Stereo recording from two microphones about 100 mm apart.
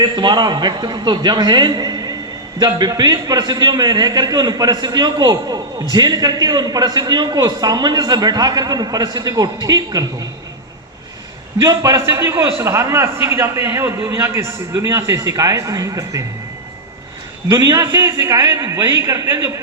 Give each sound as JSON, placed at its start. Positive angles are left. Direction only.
{"t": 0.0, "sound": "a man's voice", "side_deg": -45}
{"t": 11.6, "sound": "a man's voice", "side_deg": -35}
{"t": 17.5, "sound": "a man's voice", "side_deg": -40}